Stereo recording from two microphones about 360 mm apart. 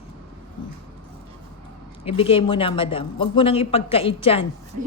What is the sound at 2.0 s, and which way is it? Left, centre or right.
A woman's voice, centre.